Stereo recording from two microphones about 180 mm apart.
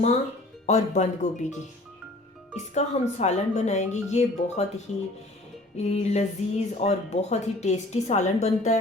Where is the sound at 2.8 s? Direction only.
40° left (ahead or behind).